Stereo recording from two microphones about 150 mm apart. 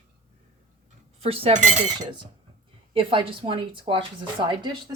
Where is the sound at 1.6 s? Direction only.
55° right (ahead or behind).